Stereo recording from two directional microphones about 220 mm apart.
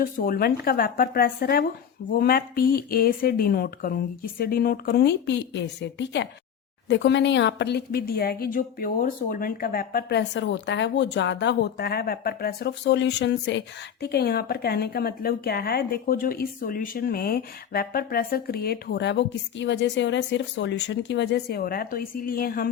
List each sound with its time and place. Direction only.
0.0 s speech: 40° left (ahead or behind)